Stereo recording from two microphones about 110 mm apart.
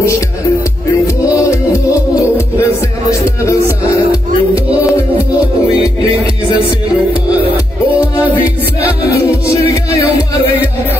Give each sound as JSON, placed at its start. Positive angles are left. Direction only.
{"t": 1.0, "sound": "music", "side_deg": 30}